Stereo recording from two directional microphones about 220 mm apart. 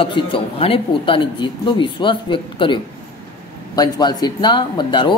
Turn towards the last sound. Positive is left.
turn(degrees=20)  # may be behind; listen again after turning